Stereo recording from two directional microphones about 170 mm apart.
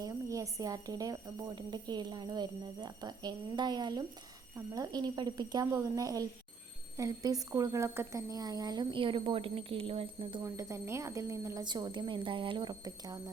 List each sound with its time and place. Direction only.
0.0 s speech: 20° right (ahead or behind)
10.4 s speech: 15° right (ahead or behind)